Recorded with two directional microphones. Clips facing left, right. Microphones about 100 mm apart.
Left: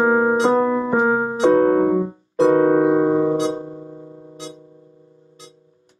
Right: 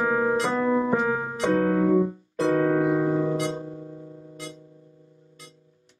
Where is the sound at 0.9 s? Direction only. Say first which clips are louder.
Left 6 dB; 30° left (ahead or behind).